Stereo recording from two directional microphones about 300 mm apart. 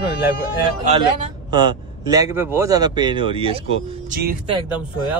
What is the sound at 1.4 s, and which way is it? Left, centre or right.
Speech, centre.